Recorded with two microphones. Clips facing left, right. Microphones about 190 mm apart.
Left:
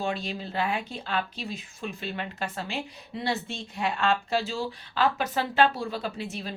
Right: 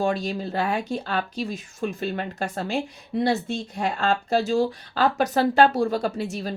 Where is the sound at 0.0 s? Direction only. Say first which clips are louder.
Right 6 dB; 45° right (ahead or behind).